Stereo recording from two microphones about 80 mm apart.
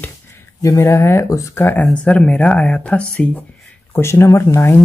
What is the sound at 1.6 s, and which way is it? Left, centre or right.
Speech, left.